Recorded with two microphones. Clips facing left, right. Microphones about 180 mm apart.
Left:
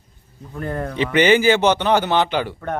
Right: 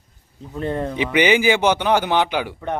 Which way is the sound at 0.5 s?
25° right (ahead or behind).